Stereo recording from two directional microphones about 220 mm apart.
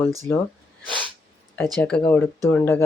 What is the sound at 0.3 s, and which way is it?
Speech, 10° left (ahead or behind).